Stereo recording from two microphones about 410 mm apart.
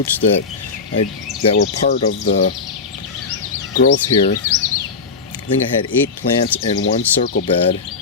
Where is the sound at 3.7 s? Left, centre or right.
Centre.